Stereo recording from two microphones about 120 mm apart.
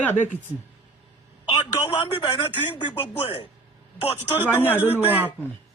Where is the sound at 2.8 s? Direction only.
40° left (ahead or behind).